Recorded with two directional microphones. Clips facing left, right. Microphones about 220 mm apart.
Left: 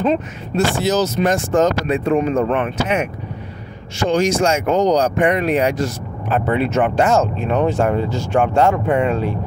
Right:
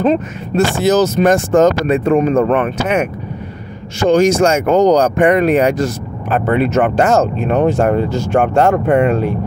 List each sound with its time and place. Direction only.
0.7 s speech: 50° right (ahead or behind)
8.4 s speech: 55° right (ahead or behind)